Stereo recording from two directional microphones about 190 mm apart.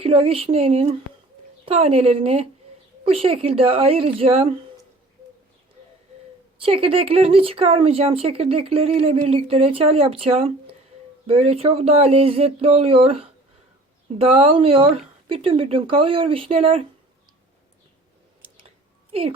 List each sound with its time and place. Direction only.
0.0 s speech: 30° right (ahead or behind)
6.6 s speech: 30° right (ahead or behind)